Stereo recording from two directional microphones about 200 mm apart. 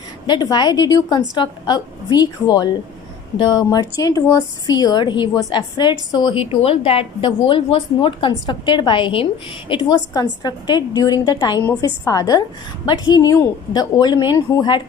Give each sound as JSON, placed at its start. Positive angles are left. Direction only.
{"t": 0.3, "sound": "a woman's voice", "side_deg": 20}